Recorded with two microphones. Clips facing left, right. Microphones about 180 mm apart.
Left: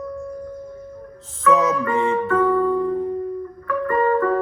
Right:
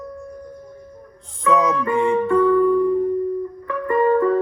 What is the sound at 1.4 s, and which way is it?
Music, 15° right (ahead or behind).